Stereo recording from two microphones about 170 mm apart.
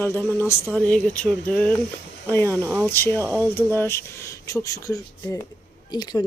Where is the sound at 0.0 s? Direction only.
15° left (ahead or behind).